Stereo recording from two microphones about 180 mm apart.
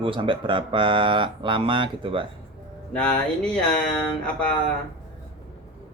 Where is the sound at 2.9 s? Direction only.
5° left (ahead or behind).